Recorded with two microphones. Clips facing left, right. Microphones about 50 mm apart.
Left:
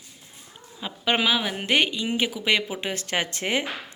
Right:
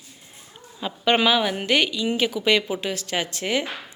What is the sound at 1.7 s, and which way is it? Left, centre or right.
Speech, left.